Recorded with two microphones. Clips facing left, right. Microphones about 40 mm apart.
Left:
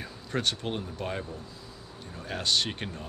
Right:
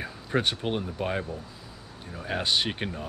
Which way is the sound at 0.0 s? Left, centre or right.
Centre.